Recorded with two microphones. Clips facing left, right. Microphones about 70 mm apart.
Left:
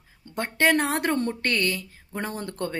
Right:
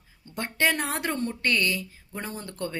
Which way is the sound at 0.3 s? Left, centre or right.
Left.